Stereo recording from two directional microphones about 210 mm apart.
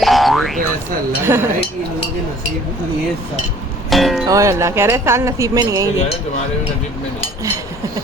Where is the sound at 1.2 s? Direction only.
10° right (ahead or behind).